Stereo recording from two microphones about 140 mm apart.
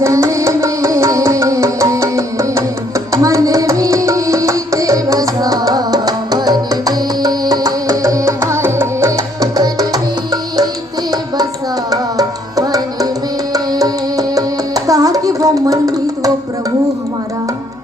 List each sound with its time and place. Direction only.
0.0 s music: 20° right (ahead or behind)
11.9 s music: 25° right (ahead or behind)
14.8 s hands: 25° right (ahead or behind)